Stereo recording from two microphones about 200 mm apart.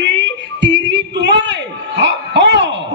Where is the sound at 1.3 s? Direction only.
60° right (ahead or behind).